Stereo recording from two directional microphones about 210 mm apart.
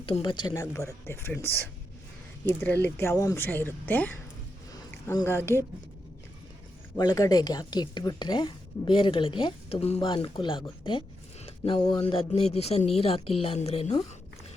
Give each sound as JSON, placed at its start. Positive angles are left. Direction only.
{"t": 0.0, "sound": "a woman's voice", "side_deg": 25}
{"t": 6.9, "sound": "a woman's voice", "side_deg": 20}